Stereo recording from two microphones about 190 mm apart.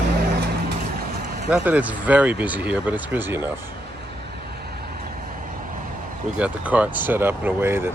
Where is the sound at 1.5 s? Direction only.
10° right (ahead or behind).